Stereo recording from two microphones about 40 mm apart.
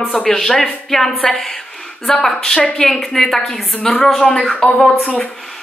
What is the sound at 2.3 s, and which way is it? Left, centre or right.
A woman's voice, centre.